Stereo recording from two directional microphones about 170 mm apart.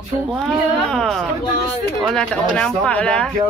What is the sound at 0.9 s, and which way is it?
Speech, centre (ahead or behind).